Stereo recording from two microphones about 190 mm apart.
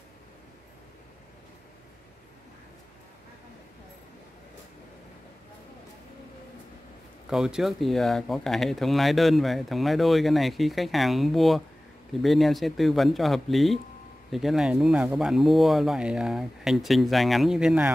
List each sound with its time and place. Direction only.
7.2 s speech: 5° right (ahead or behind)